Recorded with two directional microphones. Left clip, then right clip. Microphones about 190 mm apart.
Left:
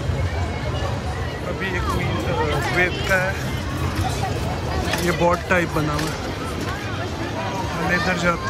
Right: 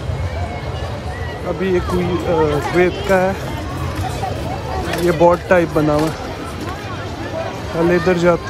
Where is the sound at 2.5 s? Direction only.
25° right (ahead or behind).